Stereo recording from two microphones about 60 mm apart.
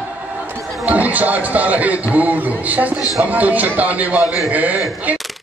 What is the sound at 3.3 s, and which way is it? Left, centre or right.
A man's voice, right.